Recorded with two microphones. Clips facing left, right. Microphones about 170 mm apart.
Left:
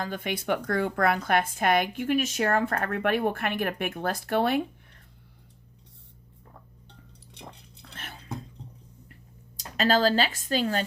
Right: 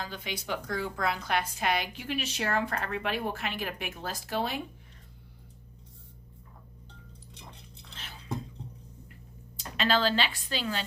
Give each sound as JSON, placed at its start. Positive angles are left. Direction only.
{"t": 0.0, "sound": "speech", "side_deg": 50}
{"t": 7.3, "sound": "a sound", "side_deg": 55}
{"t": 9.6, "sound": "speech", "side_deg": 40}